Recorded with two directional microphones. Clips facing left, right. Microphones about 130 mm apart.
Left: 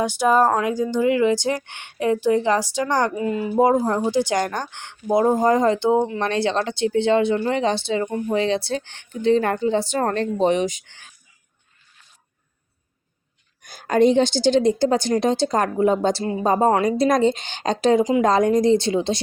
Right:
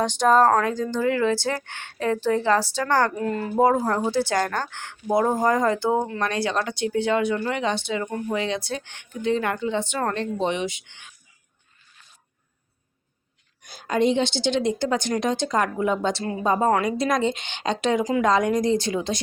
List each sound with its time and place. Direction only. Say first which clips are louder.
0.0 s speech: even; 10° left (ahead or behind); by 11.1 s 40° left (ahead or behind)
13.6 s speech: left 5 dB; 50° left (ahead or behind); by 19.2 s 30° left (ahead or behind)